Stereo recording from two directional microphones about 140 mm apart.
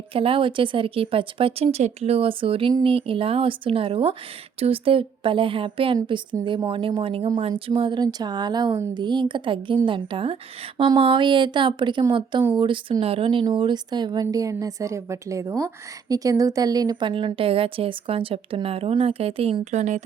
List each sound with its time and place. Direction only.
0.1 s speech: 40° right (ahead or behind); by 20.1 s 60° right (ahead or behind)